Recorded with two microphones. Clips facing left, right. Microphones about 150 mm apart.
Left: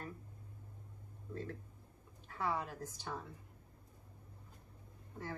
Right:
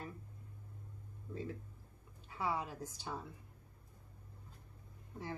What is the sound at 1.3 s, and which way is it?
A woman's voice, 10° right (ahead or behind).